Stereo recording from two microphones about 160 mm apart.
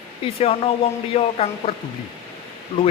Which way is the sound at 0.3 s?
35° left (ahead or behind).